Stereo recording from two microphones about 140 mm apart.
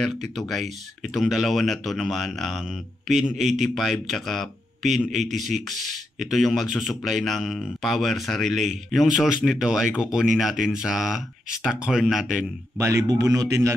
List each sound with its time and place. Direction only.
0.0 s speech: centre (ahead or behind)
12.7 s speech: 20° right (ahead or behind)